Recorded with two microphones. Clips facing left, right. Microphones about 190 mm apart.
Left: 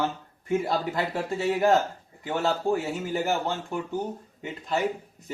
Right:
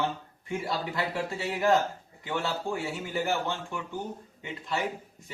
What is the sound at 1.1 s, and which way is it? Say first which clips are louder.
Speech: left 5 dB; 40° left (ahead or behind).